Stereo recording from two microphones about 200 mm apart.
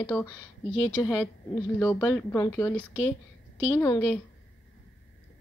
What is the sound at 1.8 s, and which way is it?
A woman's voice, 15° left (ahead or behind).